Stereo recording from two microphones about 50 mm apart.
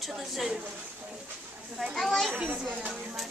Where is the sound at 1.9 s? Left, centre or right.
Centre.